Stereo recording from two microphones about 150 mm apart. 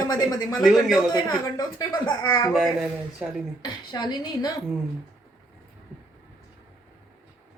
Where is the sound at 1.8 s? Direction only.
25° left (ahead or behind).